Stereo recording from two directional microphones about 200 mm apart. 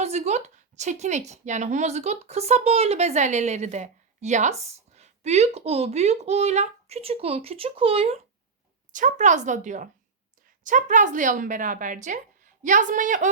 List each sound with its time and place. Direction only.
0.0 s speech: 35° right (ahead or behind)
8.9 s speech: 40° right (ahead or behind)